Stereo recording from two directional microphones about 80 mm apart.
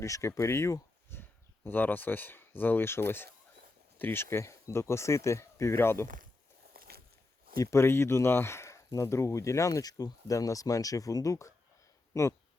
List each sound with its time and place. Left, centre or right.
0.0 s speech: left
7.6 s speech: left